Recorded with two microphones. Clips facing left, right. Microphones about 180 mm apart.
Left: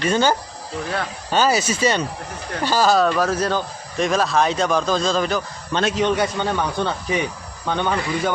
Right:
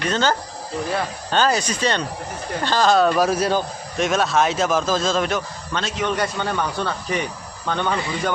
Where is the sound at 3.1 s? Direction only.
10° right (ahead or behind).